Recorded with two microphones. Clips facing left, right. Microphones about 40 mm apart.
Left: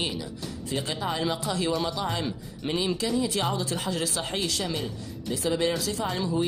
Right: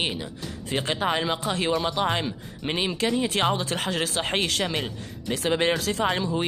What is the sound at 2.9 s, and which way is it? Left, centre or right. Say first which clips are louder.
Speech: right 3 dB; right.